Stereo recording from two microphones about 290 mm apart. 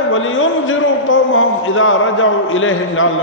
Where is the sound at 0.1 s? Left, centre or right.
Left.